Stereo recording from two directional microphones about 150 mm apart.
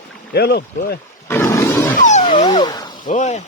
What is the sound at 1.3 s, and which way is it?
Roar, 15° left (ahead or behind).